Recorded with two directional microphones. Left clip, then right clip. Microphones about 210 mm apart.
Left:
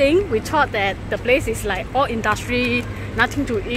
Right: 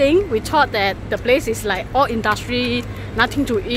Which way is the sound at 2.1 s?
5° right (ahead or behind).